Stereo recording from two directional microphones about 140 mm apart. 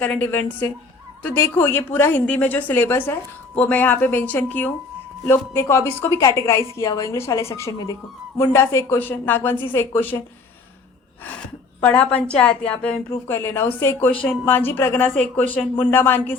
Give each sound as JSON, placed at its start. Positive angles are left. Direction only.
{"t": 0.0, "sound": "a woman's voice", "side_deg": 10}
{"t": 11.8, "sound": "a woman's voice", "side_deg": 10}
{"t": 13.1, "sound": "a woman's voice", "side_deg": 20}
{"t": 15.1, "sound": "speech", "side_deg": 5}
{"t": 15.8, "sound": "a woman's voice", "side_deg": 15}